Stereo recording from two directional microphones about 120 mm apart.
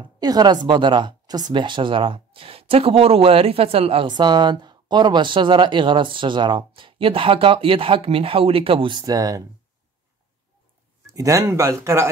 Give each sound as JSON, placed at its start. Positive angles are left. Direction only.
{"t": 0.0, "sound": "speech", "side_deg": -35}
{"t": 9.0, "sound": "speech", "side_deg": -30}
{"t": 11.1, "sound": "speech", "side_deg": -25}